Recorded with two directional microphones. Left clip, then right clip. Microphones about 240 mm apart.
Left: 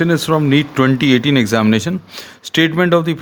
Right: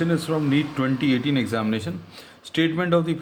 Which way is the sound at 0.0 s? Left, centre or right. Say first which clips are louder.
Left 9 dB; left.